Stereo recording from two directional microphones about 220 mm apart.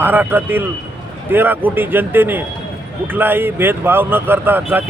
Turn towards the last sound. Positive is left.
turn(degrees=-10)  # may be behind; listen again after turning